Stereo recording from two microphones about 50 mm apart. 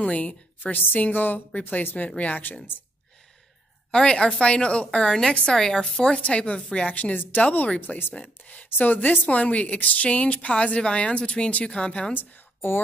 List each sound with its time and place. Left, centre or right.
0.0 s a woman's voice: left
2.0 s a woman's voice: left
3.9 s a woman's voice: centre
6.9 s a woman's voice: left
12.1 s a woman's voice: left